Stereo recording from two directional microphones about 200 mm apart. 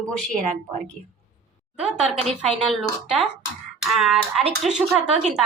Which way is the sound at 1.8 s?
Centre (ahead or behind).